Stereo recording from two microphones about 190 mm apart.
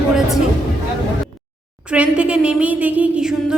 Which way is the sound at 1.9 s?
5° right (ahead or behind).